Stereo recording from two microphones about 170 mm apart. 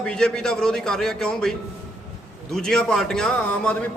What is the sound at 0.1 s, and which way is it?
A man's voice, 5° left (ahead or behind).